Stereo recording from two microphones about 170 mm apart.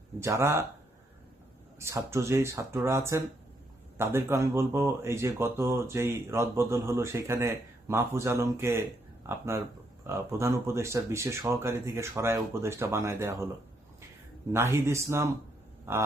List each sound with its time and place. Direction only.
0.2 s speech: 15° right (ahead or behind)
1.8 s speech: 15° right (ahead or behind)
14.5 s speech: 15° right (ahead or behind)